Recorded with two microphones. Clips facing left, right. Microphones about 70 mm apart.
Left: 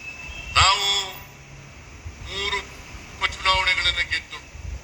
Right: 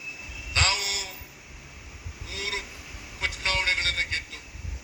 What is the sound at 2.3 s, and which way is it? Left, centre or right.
Honk, left.